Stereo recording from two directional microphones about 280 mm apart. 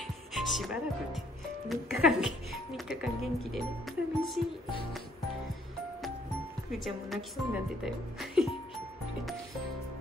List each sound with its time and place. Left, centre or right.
0.0 s music: centre
1.7 s a woman's voice: centre
6.7 s a woman's voice: centre